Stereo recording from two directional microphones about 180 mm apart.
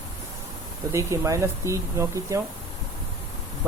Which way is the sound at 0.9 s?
15° right (ahead or behind).